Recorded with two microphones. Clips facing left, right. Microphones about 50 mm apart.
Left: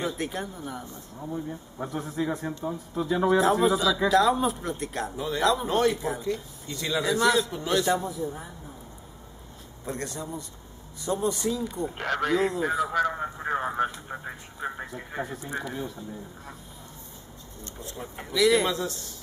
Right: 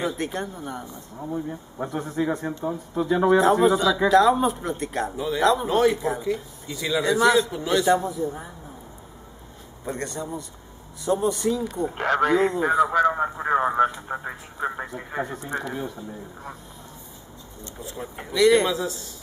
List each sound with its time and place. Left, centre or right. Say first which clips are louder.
0.0 s a man's voice: right 3 dB; centre
1.2 s a man's voice: right 4 dB; centre
9.8 s a man's voice: right 3 dB; centre
12.0 s speech: right 7 dB; right
12.3 s a man's voice: right 4 dB; centre; by 13.7 s right
13.7 s speech: right 7 dB; centre
14.0 s speech: right 6 dB; right
14.6 s speech: right 5 dB; centre
15.2 s a man's voice: right 3 dB; centre
17.7 s speech: right 4 dB; centre